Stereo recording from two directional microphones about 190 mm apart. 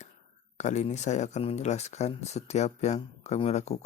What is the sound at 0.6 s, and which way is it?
Speech, 40° left (ahead or behind).